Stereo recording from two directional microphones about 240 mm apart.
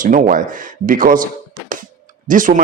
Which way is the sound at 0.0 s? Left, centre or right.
Right.